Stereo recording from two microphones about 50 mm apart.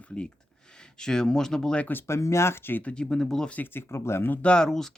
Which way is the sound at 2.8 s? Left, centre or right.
Left.